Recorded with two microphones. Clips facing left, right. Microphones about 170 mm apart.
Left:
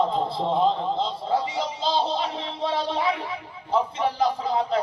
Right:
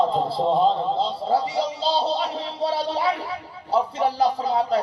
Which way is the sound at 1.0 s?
35° right (ahead or behind).